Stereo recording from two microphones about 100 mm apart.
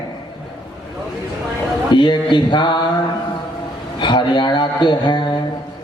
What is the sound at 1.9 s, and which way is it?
Speech, 50° left (ahead or behind).